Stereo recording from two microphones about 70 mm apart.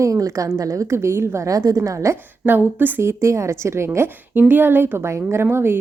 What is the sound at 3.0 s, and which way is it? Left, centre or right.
A woman's voice, right.